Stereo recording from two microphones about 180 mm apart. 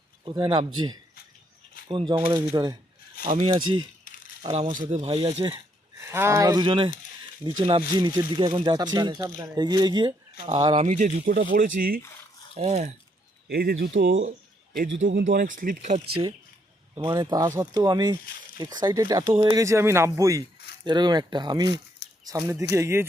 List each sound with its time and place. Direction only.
0.3 s speech: 25° right (ahead or behind)
2.1 s speech: 15° right (ahead or behind)
3.2 s speech: 30° right (ahead or behind)
4.7 s speech: 45° right (ahead or behind)
4.9 s speech: 30° right (ahead or behind)
6.1 s speech: 15° right (ahead or behind)
10.8 s speech: 45° right (ahead or behind)
12.5 s speech: 35° right (ahead or behind)
13.5 s speech: 65° right (ahead or behind); by 14.3 s 90° right
14.3 s a sound: 55° right (ahead or behind)
15.4 s speech: 50° right (ahead or behind)
16.9 s speech: 25° right (ahead or behind)